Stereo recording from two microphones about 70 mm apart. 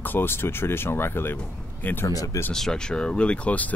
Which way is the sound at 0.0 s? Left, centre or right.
Left.